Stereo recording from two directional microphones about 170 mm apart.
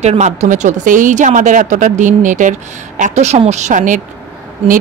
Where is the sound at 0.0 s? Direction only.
40° right (ahead or behind).